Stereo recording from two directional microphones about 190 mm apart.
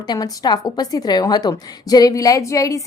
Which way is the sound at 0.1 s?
20° left (ahead or behind).